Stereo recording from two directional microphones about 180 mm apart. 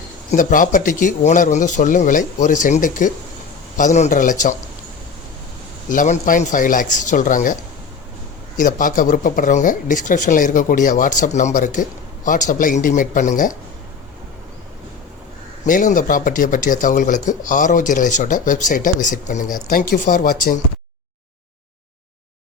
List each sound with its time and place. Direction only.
0.3 s speech: 45° left (ahead or behind)
5.9 s speech: 45° left (ahead or behind)
8.5 s speech: 45° left (ahead or behind)
15.6 s speech: 45° left (ahead or behind)